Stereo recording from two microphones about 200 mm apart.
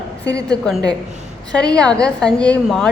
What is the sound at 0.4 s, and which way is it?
A man's voice, 5° left (ahead or behind).